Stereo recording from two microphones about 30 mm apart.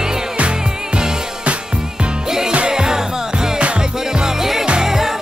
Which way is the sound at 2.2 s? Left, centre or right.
Centre.